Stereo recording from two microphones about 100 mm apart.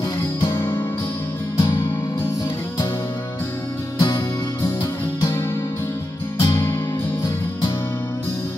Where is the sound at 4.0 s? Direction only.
55° left (ahead or behind).